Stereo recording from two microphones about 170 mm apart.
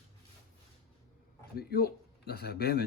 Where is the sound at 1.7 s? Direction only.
65° left (ahead or behind).